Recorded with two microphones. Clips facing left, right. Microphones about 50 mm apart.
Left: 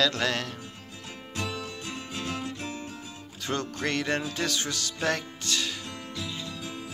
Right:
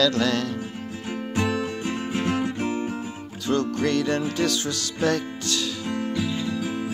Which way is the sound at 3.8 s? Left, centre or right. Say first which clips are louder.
Right 6 dB; left.